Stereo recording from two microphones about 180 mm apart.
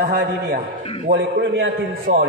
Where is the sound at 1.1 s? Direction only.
80° right.